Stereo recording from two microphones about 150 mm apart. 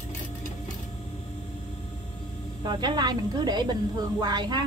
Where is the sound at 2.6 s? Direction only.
30° right (ahead or behind).